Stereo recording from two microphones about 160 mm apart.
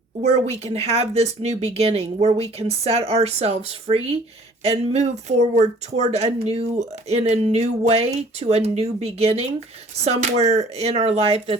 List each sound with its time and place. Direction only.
0.2 s speech: 40° right (ahead or behind)